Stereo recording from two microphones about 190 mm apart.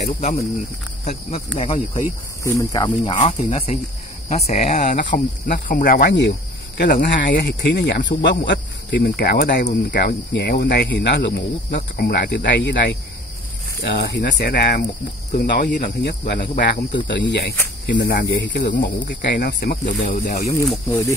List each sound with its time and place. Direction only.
0.0 s speech: 35° left (ahead or behind)
2.4 s speech: 15° left (ahead or behind)
3.2 s speech: 35° left (ahead or behind)
4.8 s cricket: 50° left (ahead or behind)
6.8 s speech: 55° left (ahead or behind)
15.3 s cricket: 50° left (ahead or behind)
16.9 s speech: 70° left (ahead or behind)